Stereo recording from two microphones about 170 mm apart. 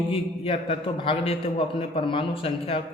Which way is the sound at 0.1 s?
35° left (ahead or behind).